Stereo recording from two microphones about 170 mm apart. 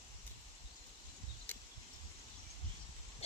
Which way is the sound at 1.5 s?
10° left (ahead or behind).